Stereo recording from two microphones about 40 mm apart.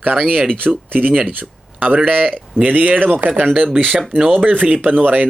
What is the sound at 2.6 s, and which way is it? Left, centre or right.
Speech, right.